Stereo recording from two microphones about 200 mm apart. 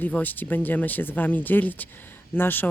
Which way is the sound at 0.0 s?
10° left (ahead or behind).